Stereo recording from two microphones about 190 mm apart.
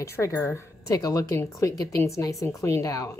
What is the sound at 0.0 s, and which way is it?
Speech, 15° left (ahead or behind).